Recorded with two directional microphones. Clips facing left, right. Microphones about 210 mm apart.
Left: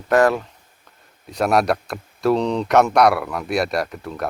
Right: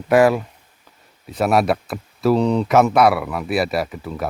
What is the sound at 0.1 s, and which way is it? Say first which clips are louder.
Speech: right 2 dB; 10° right (ahead or behind).